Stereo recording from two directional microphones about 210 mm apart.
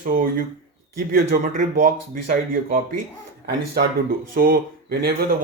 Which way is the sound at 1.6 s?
40° right (ahead or behind).